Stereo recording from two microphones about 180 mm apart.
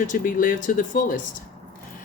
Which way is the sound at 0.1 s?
50° left (ahead or behind).